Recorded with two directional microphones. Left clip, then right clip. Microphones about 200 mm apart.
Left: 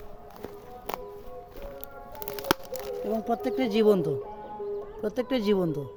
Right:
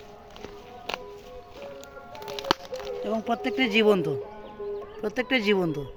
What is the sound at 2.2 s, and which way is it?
Music, 20° left (ahead or behind).